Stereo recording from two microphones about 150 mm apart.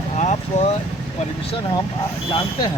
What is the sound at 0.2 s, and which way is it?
Vehicle, 50° left (ahead or behind).